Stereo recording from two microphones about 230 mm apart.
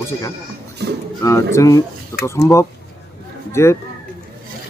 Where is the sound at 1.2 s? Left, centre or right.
Centre.